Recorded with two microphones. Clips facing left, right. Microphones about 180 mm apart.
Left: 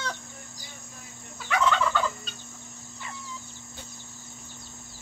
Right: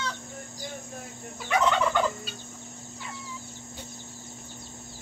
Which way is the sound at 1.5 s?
20° right (ahead or behind).